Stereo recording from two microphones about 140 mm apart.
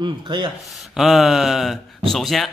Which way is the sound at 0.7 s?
Centre (ahead or behind).